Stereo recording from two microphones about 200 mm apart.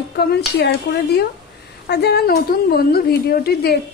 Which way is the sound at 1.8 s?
55° left (ahead or behind).